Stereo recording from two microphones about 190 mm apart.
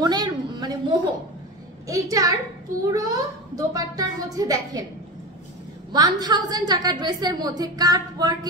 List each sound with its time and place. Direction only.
0.0 s a sound: 20° right (ahead or behind)
1.9 s a child's voice: 20° right (ahead or behind)
5.9 s a woman's voice: 20° right (ahead or behind)